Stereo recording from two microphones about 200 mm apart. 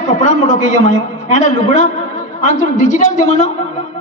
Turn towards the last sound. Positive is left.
turn(degrees=35)  # may be behind; listen again after turning